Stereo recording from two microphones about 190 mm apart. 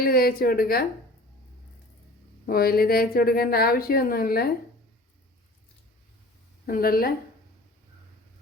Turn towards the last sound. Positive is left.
turn(degrees=50)  # may be behind; listen again after turning